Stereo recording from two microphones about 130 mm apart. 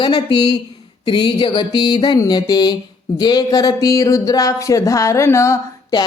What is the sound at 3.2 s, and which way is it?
Speech, 30° left (ahead or behind).